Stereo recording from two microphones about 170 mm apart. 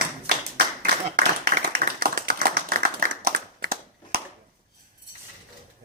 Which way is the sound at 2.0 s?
65° right (ahead or behind).